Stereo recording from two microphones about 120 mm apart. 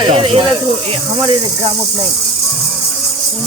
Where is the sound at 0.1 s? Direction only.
50° right (ahead or behind).